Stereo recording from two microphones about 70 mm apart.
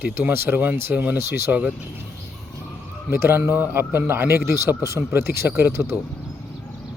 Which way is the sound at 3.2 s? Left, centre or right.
Right.